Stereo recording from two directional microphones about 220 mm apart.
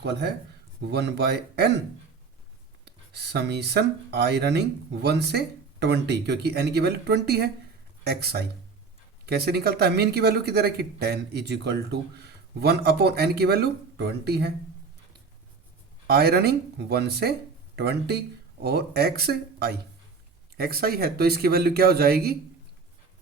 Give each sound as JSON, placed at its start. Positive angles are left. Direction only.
{"t": 0.0, "sound": "speech", "side_deg": -50}
{"t": 2.8, "sound": "speech", "side_deg": -50}
{"t": 16.1, "sound": "speech", "side_deg": -45}